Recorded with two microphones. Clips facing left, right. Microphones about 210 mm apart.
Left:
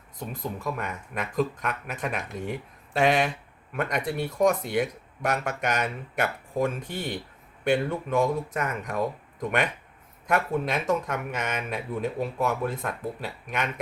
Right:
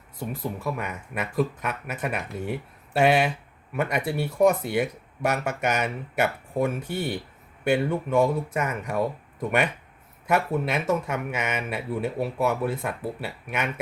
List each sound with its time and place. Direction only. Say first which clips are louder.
0.2 s speech: right 3 dB; 10° right (ahead or behind)